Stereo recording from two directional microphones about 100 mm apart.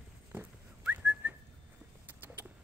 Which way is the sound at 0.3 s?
15° right (ahead or behind).